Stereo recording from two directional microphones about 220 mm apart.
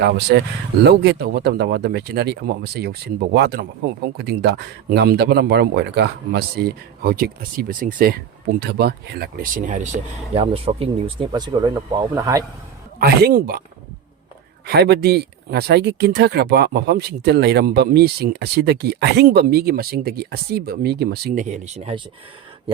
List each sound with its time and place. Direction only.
0.0 s speech: 50° right (ahead or behind); by 12.5 s 15° right (ahead or behind)
13.0 s speech: 45° right (ahead or behind)
14.7 s speech: 50° right (ahead or behind)
21.4 s speech: 30° right (ahead or behind)